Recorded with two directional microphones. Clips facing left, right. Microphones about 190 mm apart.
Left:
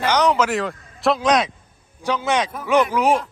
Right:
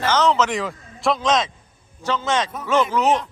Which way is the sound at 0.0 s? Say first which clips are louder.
Left 1 dB; 15° left (ahead or behind).